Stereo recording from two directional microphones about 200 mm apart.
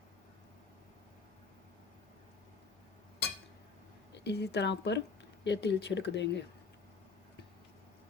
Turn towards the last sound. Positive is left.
turn(degrees=60)  # may be behind; listen again after turning